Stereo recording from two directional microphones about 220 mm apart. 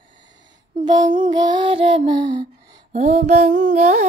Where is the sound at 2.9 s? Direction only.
30° right (ahead or behind).